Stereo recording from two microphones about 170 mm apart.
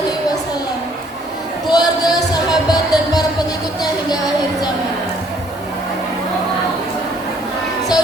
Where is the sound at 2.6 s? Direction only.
20° left (ahead or behind).